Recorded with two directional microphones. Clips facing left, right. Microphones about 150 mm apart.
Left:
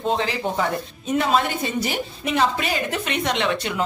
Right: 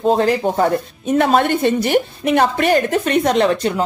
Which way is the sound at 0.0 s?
45° right (ahead or behind).